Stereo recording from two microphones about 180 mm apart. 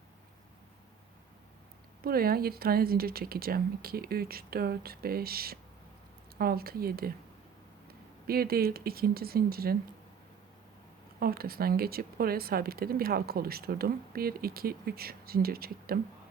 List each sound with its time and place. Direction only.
2.0 s speech: 55° right (ahead or behind)
8.3 s speech: 55° right (ahead or behind)
11.2 s speech: 55° right (ahead or behind)